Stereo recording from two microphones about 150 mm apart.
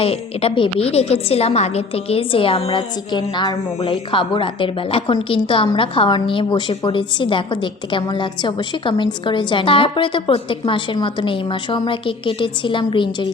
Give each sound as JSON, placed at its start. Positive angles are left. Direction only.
{"t": 0.0, "sound": "a woman's voice", "side_deg": 40}